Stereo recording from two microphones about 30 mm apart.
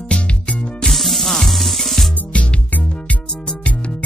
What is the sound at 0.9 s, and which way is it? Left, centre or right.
Music, centre.